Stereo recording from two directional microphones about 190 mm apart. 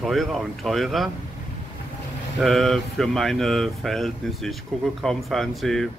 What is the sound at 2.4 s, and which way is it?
Speech, centre (ahead or behind).